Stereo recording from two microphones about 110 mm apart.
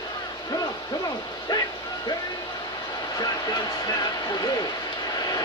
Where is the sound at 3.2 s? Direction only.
35° left (ahead or behind).